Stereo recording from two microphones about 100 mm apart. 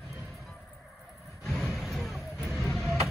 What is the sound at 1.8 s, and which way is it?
Vehicle, centre (ahead or behind).